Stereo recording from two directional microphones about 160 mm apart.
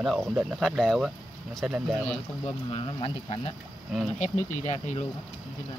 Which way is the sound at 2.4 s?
35° left (ahead or behind).